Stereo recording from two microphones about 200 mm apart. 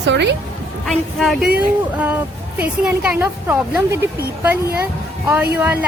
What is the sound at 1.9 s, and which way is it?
A woman's voice, 10° right (ahead or behind).